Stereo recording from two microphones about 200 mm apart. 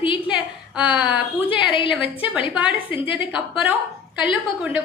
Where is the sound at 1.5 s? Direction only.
25° left (ahead or behind).